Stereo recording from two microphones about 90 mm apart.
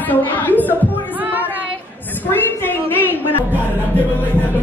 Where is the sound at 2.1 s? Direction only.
25° left (ahead or behind).